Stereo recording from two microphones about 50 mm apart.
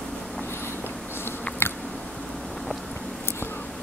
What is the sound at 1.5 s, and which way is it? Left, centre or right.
Biting, left.